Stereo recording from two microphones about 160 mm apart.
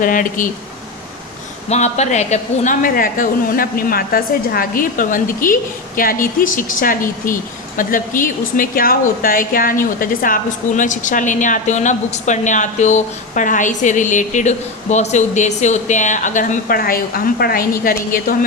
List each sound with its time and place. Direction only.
0.0 s a woman's voice: 55° left (ahead or behind)
1.7 s a woman's voice: 45° left (ahead or behind); by 18.3 s 65° left (ahead or behind)